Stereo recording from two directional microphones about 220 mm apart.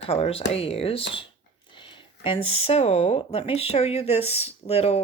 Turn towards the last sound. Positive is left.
turn(degrees=30)  # may be behind; listen again after turning